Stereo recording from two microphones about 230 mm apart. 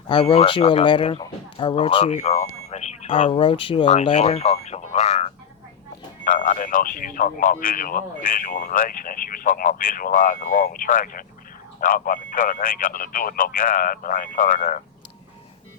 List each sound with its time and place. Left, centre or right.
0.1 s speech: left
4.6 s a sound: left
6.2 s speech: left